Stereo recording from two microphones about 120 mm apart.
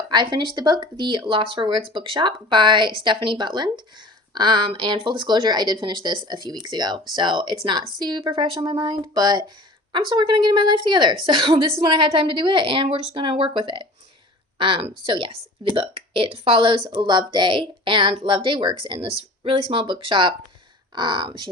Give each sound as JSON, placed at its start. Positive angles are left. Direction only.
{"t": 0.1, "sound": "a woman's voice", "side_deg": -40}